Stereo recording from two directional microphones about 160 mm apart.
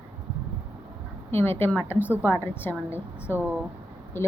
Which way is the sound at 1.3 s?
15° left (ahead or behind).